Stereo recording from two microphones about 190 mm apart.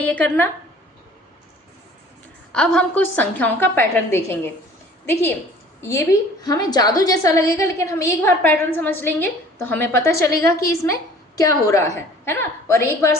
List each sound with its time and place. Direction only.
0.0 s a woman's voice: 10° left (ahead or behind)
2.5 s a woman's voice: 5° left (ahead or behind)
5.8 s a woman's voice: 15° left (ahead or behind)